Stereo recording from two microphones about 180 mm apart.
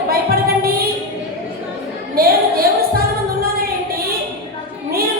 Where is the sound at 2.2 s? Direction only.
55° right (ahead or behind).